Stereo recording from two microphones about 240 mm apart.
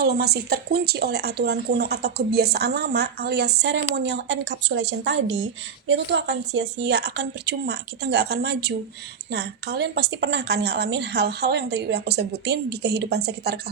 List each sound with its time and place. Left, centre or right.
0.0 s speech: right